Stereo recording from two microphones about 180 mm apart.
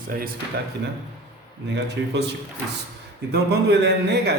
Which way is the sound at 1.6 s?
70° right (ahead or behind).